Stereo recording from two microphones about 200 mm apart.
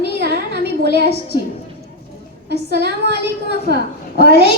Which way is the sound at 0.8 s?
55° right (ahead or behind).